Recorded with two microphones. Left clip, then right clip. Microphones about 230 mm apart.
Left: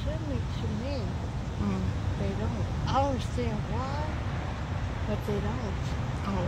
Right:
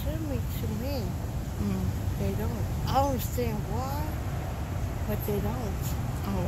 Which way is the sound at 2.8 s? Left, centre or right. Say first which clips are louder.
Right 1 dB; right.